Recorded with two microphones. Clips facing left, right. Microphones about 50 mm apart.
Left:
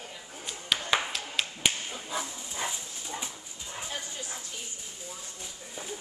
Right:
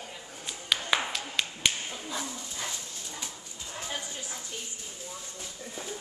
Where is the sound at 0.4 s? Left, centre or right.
Centre.